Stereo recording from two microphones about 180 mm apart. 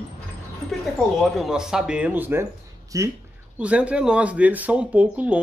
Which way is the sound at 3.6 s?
5° right (ahead or behind).